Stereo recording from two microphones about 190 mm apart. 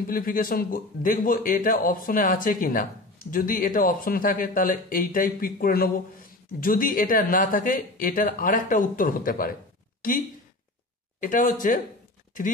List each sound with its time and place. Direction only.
0.0 s a man's voice: 50° left (ahead or behind)